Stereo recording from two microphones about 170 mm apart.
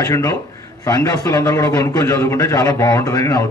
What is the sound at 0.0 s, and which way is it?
A man's voice, 20° left (ahead or behind).